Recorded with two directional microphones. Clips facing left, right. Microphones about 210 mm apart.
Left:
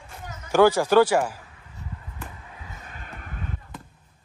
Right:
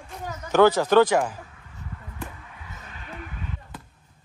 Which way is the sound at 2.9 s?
45° left (ahead or behind).